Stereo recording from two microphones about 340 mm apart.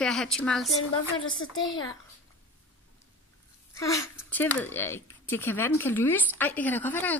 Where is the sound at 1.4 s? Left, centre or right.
Left.